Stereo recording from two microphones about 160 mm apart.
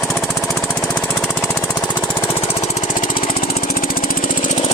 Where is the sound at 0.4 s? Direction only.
15° left (ahead or behind).